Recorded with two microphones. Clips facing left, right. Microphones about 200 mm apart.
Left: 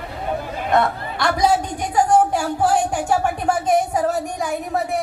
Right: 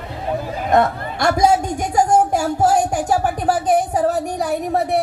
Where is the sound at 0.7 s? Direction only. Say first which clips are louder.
Right 3 dB; 45° right (ahead or behind).